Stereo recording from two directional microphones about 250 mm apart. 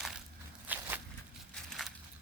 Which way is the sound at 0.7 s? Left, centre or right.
Centre.